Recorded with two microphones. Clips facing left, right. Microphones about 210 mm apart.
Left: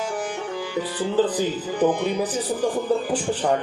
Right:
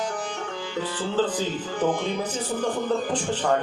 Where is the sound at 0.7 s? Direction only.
15° left (ahead or behind).